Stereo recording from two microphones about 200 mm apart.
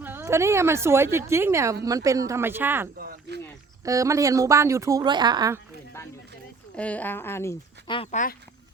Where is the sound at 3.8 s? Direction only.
15° right (ahead or behind).